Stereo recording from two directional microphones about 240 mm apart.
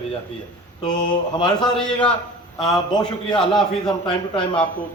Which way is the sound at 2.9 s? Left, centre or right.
Centre.